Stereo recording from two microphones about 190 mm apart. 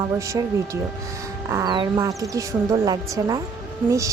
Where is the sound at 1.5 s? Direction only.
20° right (ahead or behind).